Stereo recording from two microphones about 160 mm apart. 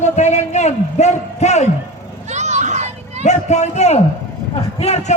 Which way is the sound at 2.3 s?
45° right (ahead or behind).